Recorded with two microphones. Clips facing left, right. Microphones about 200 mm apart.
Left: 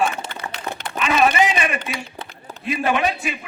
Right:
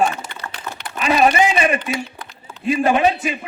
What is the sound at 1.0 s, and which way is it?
A man's voice, 35° right (ahead or behind).